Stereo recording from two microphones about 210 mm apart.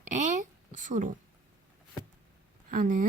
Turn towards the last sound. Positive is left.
turn(degrees=-40)  # may be behind; listen again after turning